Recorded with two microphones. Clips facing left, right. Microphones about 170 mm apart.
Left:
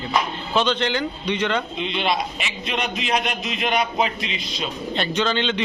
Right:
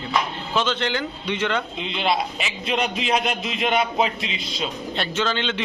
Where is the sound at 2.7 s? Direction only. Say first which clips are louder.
Right 2 dB; 30° right (ahead or behind).